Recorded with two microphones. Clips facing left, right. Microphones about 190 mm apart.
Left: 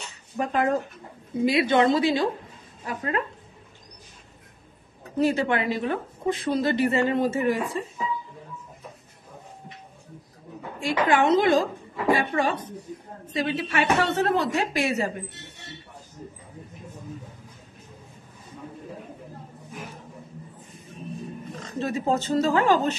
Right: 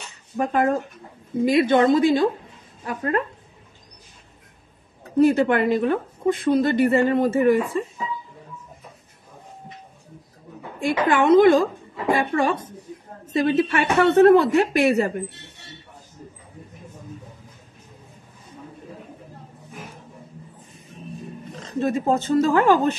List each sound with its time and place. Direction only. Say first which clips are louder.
0.4 s a woman's voice: right 3 dB; 50° right (ahead or behind)
5.2 s a woman's voice: right 6 dB; 55° right (ahead or behind)
10.8 s a woman's voice: right 2 dB; 55° right (ahead or behind)
21.8 s a woman's voice: right 4 dB; 50° right (ahead or behind)